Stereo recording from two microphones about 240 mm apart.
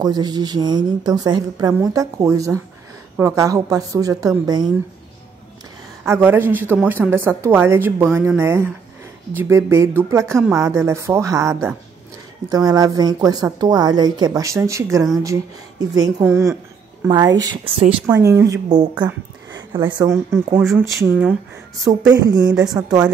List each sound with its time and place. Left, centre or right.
0.0 s a woman's voice: centre
6.0 s a woman's voice: centre
20.5 s speech: centre
22.1 s a woman's voice: centre